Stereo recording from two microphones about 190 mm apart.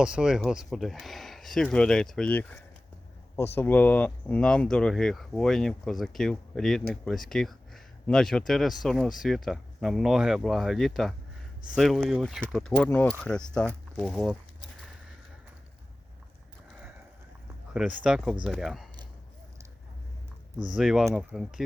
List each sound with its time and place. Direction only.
0.0 s speech: 5° right (ahead or behind)
17.7 s speech: 5° right (ahead or behind)
20.7 s speech: centre (ahead or behind)